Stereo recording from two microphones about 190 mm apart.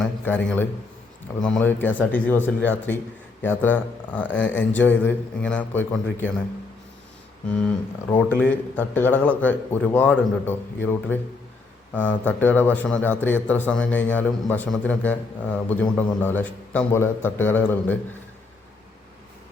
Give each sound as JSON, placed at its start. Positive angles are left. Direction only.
{"t": 0.0, "sound": "a man's voice", "side_deg": 10}
{"t": 7.5, "sound": "speech", "side_deg": 5}